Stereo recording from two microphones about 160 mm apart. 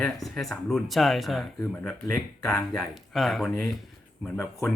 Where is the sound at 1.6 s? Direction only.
15° left (ahead or behind).